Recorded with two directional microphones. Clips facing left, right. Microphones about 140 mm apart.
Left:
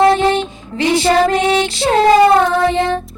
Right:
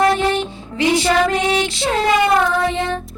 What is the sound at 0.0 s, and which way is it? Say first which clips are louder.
Music: left 4 dB; 25° left (ahead or behind).